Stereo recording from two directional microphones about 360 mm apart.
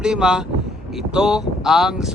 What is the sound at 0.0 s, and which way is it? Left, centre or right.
Speech, centre.